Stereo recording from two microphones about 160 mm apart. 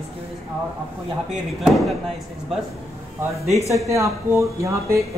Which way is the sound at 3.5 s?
20° left (ahead or behind).